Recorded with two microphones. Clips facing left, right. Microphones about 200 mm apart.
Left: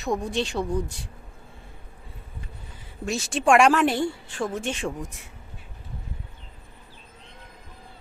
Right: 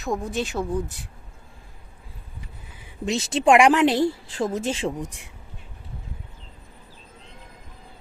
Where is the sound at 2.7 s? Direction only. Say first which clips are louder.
Right 3 dB; 15° right (ahead or behind).